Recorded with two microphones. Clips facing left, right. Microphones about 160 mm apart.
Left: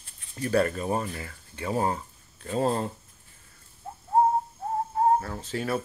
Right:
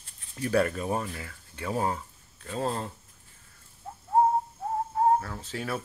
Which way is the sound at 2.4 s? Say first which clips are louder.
Left 5 dB; 15° left (ahead or behind).